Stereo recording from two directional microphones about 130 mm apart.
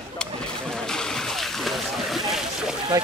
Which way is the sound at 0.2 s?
5° left (ahead or behind).